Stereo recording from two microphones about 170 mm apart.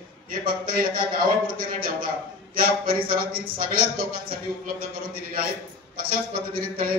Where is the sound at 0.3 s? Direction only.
55° right (ahead or behind).